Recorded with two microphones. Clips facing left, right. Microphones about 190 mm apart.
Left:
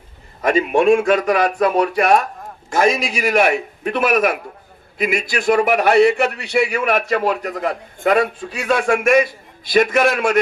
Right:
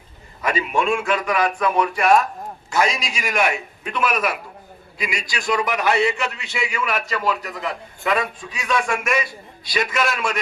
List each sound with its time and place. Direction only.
0.4 s a man's voice: 50° left (ahead or behind)
6.7 s a man's voice: 45° left (ahead or behind)